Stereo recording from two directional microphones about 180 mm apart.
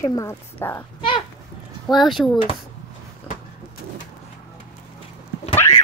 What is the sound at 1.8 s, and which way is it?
Speech, centre (ahead or behind).